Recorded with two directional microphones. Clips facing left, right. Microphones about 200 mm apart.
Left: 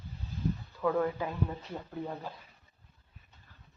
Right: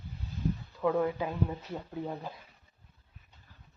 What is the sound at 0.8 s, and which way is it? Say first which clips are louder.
Speech: right 1 dB; 15° right (ahead or behind).